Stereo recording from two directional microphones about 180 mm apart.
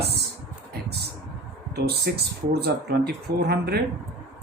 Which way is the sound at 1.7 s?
60° right (ahead or behind).